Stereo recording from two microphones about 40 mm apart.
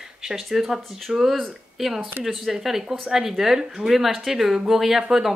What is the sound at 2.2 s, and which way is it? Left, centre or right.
Speech, right.